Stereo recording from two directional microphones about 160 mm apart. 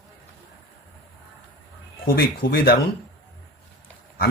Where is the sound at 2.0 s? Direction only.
70° left (ahead or behind).